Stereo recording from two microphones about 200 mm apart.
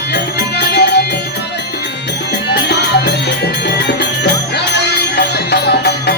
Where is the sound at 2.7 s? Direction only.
55° left (ahead or behind).